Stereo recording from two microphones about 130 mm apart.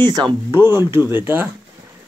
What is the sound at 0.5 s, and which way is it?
Speech, 20° right (ahead or behind).